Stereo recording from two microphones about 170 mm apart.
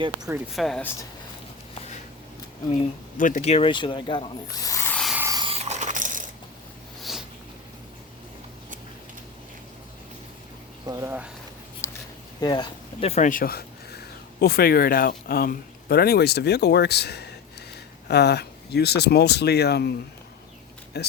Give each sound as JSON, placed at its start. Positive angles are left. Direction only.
{"t": 0.0, "sound": "speech", "side_deg": -25}
{"t": 0.5, "sound": "speech", "side_deg": 0}
{"t": 3.2, "sound": "speech", "side_deg": 50}
{"t": 5.1, "sound": "mechanisms", "side_deg": -15}
{"t": 5.4, "sound": "a sound", "side_deg": -35}
{"t": 7.0, "sound": "a sound", "side_deg": 0}
{"t": 10.8, "sound": "speech", "side_deg": -20}
{"t": 11.8, "sound": "a sound", "side_deg": 15}
{"t": 12.4, "sound": "speech", "side_deg": 25}